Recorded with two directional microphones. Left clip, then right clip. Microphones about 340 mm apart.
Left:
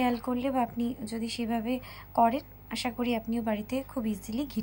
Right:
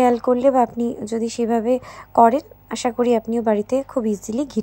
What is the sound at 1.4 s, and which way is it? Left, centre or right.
A woman's voice, right.